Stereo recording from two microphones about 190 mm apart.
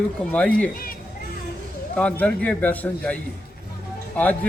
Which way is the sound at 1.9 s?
5° left (ahead or behind).